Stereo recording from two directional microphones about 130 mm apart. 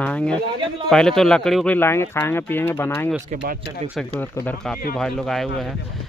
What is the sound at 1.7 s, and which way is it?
Speech, 20° left (ahead or behind).